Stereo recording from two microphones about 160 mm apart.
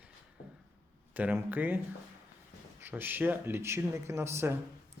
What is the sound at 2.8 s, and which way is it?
Speech, 10° right (ahead or behind).